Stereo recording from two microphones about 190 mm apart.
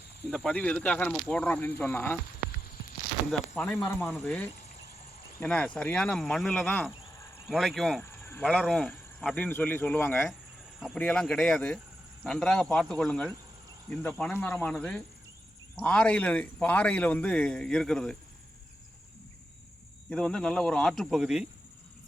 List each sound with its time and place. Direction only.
0.3 s a man's voice: 5° left (ahead or behind)
3.5 s a man's voice: 5° left (ahead or behind)
20.1 s speech: 5° left (ahead or behind)